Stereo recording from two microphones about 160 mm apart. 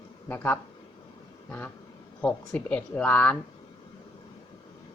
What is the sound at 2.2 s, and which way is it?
A woman's voice, 10° left (ahead or behind).